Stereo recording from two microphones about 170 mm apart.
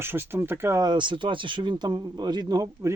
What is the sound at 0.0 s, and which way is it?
Speech, 15° right (ahead or behind).